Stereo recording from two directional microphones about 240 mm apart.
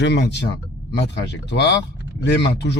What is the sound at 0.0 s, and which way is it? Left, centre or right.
Speech, left.